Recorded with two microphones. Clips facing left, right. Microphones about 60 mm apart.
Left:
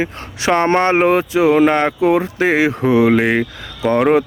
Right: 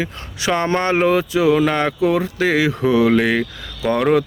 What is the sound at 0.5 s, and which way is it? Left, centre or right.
Speech, left.